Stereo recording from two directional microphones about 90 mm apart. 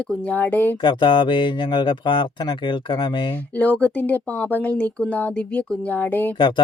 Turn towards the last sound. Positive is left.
turn(degrees=20)  # may be behind; listen again after turning